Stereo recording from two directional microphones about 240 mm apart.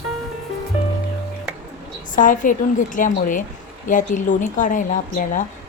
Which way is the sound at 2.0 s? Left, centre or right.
Left.